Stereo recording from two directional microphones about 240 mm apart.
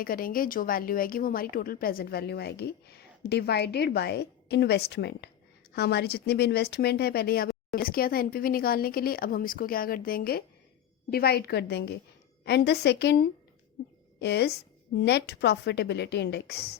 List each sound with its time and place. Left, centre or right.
0.0 s a woman's voice: left